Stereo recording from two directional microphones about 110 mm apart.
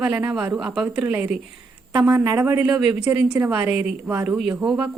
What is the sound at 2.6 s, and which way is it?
A woman's voice, 10° right (ahead or behind).